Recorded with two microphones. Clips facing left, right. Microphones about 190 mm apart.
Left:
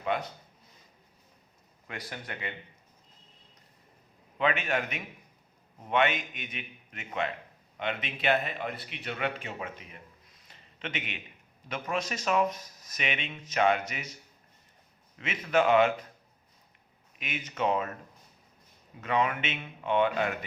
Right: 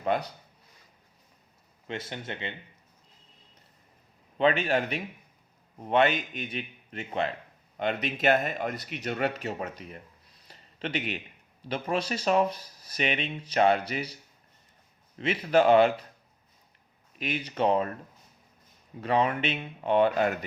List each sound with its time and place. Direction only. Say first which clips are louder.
0.0 s speech: right 3 dB; 35° right (ahead or behind)
1.9 s speech: right 4 dB; 25° right (ahead or behind)
4.4 s speech: right 4 dB; 35° right (ahead or behind)
10.4 s a sound: right 5 dB; 35° right (ahead or behind)
11.7 s speech: right 4 dB; 30° right (ahead or behind)
15.2 s speech: right 4 dB; 35° right (ahead or behind)
17.2 s speech: right 4 dB; 35° right (ahead or behind)
18.9 s speech: right 3 dB; 35° right (ahead or behind)